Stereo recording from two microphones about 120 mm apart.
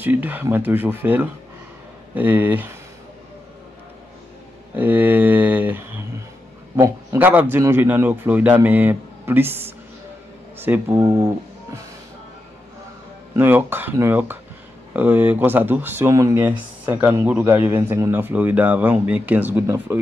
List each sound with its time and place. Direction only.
0.0 s speech: 15° right (ahead or behind)
4.7 s speech: 15° right (ahead or behind)
7.2 s speech: 15° right (ahead or behind)
13.4 s speech: 15° right (ahead or behind)